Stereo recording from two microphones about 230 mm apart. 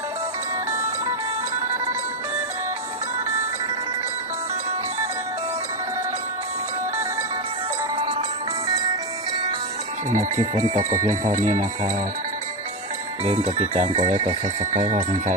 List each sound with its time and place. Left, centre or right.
10.1 s speech: right
13.2 s speech: right